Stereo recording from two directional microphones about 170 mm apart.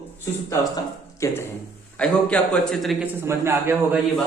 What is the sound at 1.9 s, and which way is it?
A man's voice, 5° left (ahead or behind).